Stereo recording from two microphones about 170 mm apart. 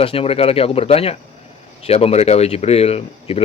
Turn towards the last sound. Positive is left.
turn(degrees=35)  # may be behind; listen again after turning